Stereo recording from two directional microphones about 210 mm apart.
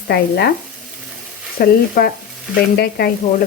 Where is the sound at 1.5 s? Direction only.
40° left (ahead or behind).